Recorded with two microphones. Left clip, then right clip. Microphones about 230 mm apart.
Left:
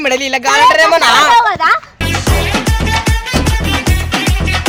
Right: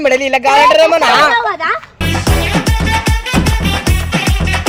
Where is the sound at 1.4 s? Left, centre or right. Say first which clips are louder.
Left 4 dB; left.